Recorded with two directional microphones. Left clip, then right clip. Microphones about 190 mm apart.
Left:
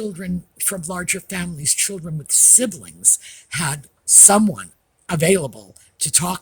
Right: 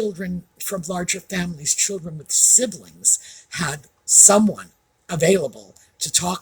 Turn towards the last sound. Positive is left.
turn(degrees=50)  # may be behind; listen again after turning